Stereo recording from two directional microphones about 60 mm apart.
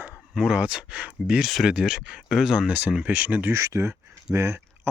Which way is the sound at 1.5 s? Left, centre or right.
Centre.